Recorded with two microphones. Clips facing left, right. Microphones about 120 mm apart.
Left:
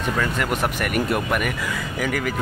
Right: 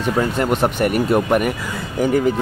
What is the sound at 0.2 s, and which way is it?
Speech, 30° right (ahead or behind).